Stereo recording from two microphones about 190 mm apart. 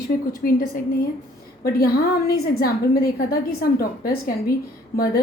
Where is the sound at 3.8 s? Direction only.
50° left (ahead or behind).